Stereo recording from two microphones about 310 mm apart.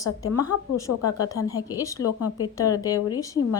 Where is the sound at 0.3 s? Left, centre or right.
Left.